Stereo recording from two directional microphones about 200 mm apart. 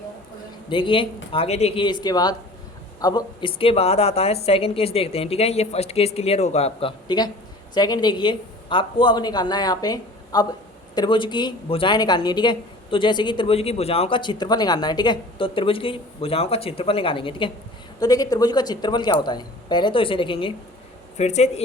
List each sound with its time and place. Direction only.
0.7 s a woman's voice: 25° left (ahead or behind)